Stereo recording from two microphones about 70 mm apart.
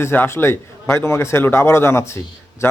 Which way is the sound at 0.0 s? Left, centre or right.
Left.